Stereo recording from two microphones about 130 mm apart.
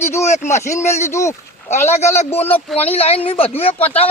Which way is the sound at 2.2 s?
55° left (ahead or behind).